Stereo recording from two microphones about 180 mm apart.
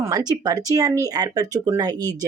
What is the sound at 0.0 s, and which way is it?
Speech, 20° right (ahead or behind).